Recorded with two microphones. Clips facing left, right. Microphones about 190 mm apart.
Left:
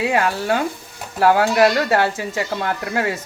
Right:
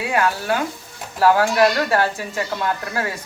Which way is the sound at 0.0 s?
25° left (ahead or behind).